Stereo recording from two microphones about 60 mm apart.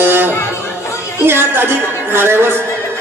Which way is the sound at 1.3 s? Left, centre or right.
Right.